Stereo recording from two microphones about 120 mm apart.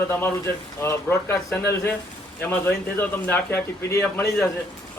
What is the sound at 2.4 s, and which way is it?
A man's voice, 15° left (ahead or behind).